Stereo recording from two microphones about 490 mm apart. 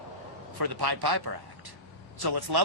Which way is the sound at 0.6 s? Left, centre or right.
Right.